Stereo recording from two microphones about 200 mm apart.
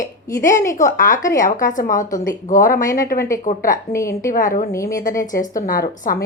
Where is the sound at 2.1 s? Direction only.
15° left (ahead or behind).